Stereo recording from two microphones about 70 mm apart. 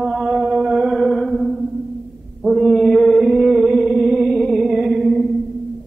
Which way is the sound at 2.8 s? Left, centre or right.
Centre.